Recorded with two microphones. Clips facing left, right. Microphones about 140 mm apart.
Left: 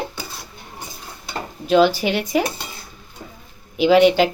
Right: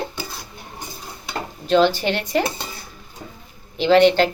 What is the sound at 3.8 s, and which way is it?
Speech, 10° left (ahead or behind).